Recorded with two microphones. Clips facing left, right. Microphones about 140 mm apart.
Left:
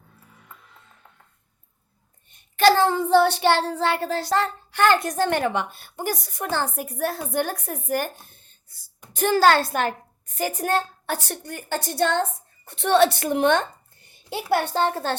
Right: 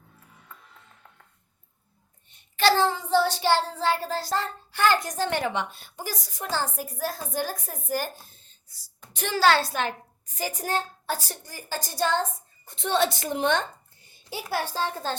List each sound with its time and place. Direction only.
2.3 s child singing: 50° left (ahead or behind)
9.1 s a woman's voice: 45° left (ahead or behind); by 14.4 s 65° left (ahead or behind)
14.5 s child singing: 65° left (ahead or behind)